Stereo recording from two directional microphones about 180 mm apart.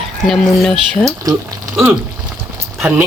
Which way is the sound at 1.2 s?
20° right (ahead or behind).